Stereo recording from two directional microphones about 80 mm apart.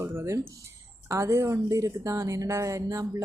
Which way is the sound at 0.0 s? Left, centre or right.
Right.